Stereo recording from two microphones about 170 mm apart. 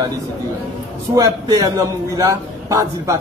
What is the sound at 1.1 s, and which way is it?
A man's voice, 20° right (ahead or behind).